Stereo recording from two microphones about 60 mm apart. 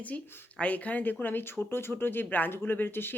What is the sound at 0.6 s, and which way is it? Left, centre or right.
Speech, left.